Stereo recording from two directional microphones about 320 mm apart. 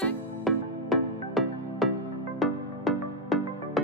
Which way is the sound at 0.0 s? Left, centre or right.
Centre.